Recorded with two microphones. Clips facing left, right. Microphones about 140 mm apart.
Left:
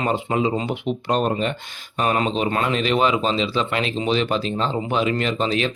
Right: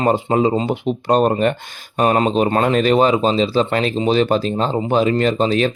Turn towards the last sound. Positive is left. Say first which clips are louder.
# right 6 dB
turn(degrees=-40)  # may be behind; listen again after turning